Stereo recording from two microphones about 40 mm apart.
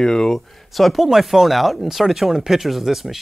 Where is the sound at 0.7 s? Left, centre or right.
Centre.